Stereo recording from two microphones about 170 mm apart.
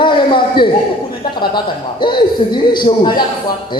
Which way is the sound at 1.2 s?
25° left (ahead or behind).